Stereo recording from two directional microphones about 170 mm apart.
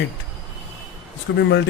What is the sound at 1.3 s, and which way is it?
Speech, 90° left.